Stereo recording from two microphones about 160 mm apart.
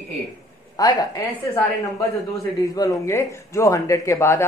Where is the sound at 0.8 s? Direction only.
20° left (ahead or behind).